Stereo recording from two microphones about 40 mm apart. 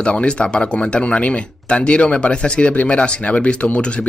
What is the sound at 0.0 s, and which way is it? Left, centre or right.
Speech, left.